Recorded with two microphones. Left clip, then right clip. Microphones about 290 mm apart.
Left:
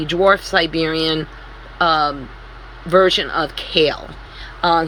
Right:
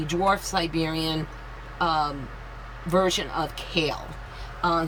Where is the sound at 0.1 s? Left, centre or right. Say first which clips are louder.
Left 10 dB; centre.